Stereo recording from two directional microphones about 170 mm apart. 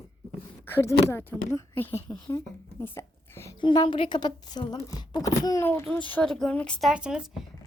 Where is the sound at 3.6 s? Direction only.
30° left (ahead or behind); by 7.2 s 5° right (ahead or behind).